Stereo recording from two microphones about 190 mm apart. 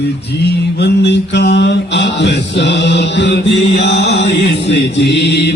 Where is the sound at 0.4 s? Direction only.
65° left (ahead or behind).